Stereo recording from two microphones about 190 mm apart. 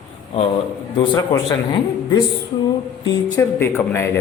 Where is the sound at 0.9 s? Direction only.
25° left (ahead or behind).